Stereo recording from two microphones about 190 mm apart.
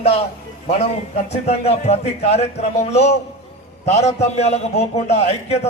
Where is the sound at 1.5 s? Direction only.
30° left (ahead or behind).